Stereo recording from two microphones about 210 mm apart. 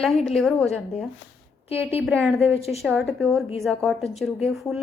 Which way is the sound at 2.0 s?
10° right (ahead or behind).